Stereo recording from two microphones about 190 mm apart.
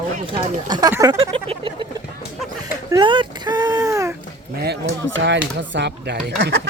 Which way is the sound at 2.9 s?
25° right (ahead or behind).